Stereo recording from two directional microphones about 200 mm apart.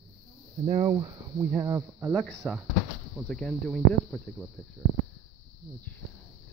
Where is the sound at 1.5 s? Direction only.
10° right (ahead or behind).